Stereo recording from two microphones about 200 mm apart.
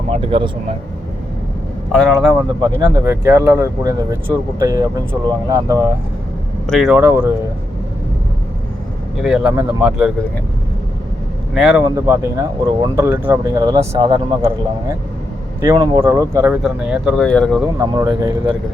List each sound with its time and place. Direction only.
0.1 s speech: 25° right (ahead or behind)
1.9 s speech: 5° left (ahead or behind)
2.6 s speech: 15° right (ahead or behind)
6.7 s speech: centre (ahead or behind)
9.2 s speech: 5° right (ahead or behind)
11.5 s speech: 5° right (ahead or behind)
17.7 s speech: 20° right (ahead or behind)